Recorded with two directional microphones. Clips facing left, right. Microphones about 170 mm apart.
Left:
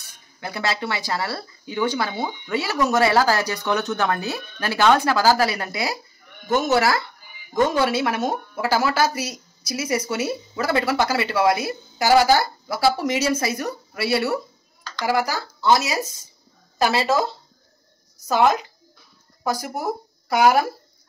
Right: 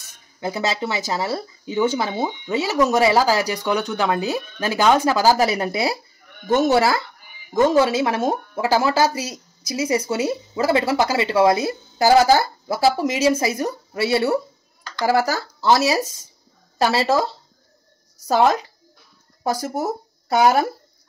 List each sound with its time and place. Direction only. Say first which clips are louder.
0.4 s speech: right 3 dB; 20° right (ahead or behind)
15.0 s speech: right 3 dB; 40° right (ahead or behind)
18.2 s speech: right 1 dB; 35° right (ahead or behind)